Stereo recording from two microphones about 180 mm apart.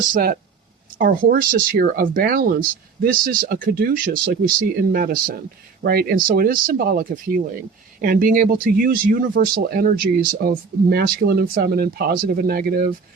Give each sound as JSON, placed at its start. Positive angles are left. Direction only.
{"t": 0.1, "sound": "speech", "side_deg": -55}